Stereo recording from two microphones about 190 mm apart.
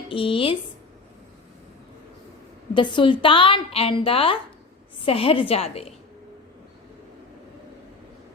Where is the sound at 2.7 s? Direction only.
25° left (ahead or behind).